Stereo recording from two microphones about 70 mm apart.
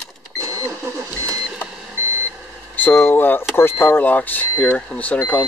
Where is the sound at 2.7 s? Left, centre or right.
Left.